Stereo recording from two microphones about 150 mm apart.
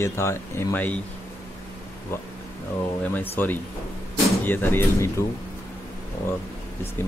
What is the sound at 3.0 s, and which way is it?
Speech, 10° left (ahead or behind).